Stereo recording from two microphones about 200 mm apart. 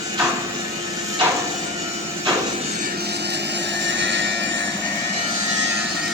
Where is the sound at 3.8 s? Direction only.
60° right (ahead or behind).